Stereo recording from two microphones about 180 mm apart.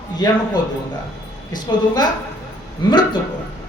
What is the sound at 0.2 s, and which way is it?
Speech, 20° left (ahead or behind).